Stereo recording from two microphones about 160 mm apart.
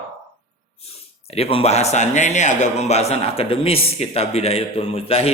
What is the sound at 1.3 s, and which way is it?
Speech, 35° left (ahead or behind).